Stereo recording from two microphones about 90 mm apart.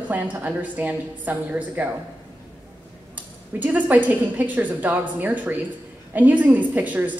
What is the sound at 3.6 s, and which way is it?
A woman's voice, 20° right (ahead or behind).